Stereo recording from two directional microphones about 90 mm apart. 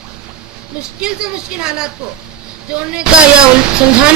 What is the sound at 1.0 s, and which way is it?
Speech, 10° right (ahead or behind).